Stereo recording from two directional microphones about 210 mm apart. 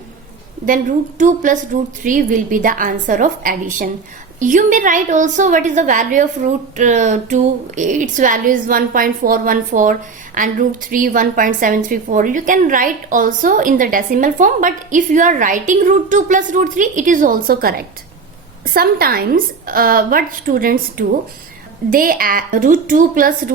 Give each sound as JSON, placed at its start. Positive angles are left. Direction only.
{"t": 0.6, "sound": "a woman's voice", "side_deg": -40}